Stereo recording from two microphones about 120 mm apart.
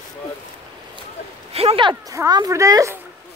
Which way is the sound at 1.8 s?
40° right (ahead or behind).